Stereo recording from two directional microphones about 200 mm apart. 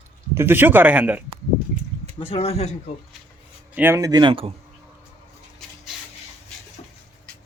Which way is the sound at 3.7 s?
10° right (ahead or behind).